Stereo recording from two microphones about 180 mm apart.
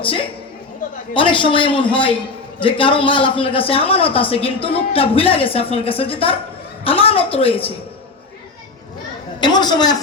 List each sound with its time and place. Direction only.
0.0 s a woman's voice: 30° left (ahead or behind)
9.4 s a man's voice: 25° left (ahead or behind)